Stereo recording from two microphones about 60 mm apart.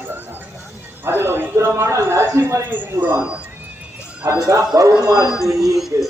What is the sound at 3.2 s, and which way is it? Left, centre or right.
Speech, centre.